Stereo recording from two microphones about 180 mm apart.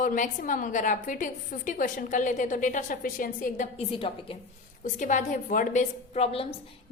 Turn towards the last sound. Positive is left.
turn(degrees=35)  # may be behind; listen again after turning